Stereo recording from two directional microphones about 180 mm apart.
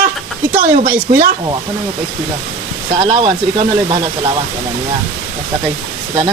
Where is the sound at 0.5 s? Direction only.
50° right (ahead or behind).